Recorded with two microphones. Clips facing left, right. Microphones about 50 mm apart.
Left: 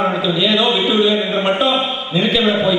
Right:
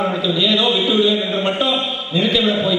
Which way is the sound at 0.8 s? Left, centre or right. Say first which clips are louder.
Left 1 dB; centre.